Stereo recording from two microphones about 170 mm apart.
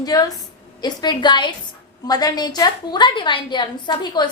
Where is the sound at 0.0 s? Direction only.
20° left (ahead or behind).